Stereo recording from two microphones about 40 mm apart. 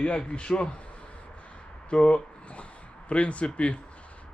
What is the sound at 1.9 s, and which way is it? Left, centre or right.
Speech, centre.